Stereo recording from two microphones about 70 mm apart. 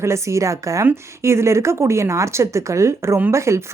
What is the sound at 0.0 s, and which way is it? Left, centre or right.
A woman's voice, right.